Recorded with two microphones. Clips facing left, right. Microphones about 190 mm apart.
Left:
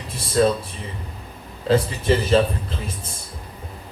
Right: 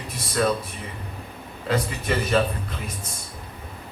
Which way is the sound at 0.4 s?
30° left (ahead or behind).